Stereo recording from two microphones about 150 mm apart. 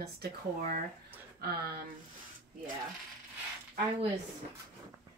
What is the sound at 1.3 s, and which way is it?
Speech, 90° right.